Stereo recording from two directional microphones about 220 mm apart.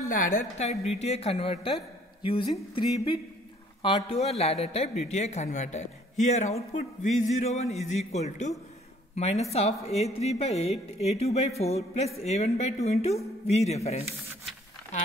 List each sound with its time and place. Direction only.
0.1 s speech: 35° left (ahead or behind)
3.8 s a man's voice: 25° left (ahead or behind)